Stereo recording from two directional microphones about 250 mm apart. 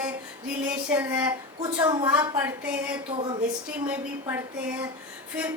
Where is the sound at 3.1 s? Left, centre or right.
Centre.